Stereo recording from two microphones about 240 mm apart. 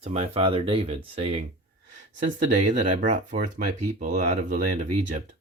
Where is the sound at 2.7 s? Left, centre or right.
Right.